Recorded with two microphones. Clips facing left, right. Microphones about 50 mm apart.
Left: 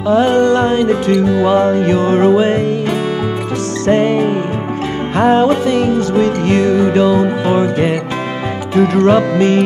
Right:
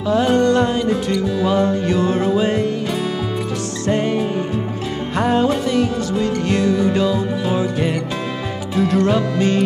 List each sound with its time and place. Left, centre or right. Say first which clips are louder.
0.1 s music: left 4 dB; left
0.7 s music: left 6 dB; left
1.3 s music: left 5 dB; left
1.6 s music: left 5 dB; left
2.0 s music: left 7 dB; left
3.9 s music: left 7 dB; left
5.1 s music: left 6 dB; left
5.9 s music: left 6 dB; left
8.7 s music: left 6 dB; left